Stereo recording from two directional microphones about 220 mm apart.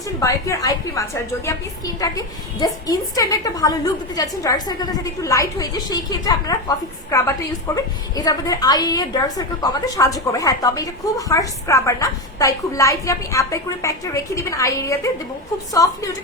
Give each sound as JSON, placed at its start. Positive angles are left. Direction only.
{"t": 0.2, "sound": "a woman's voice", "side_deg": 15}